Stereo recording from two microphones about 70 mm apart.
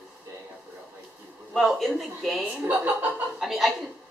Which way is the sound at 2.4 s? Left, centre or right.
Right.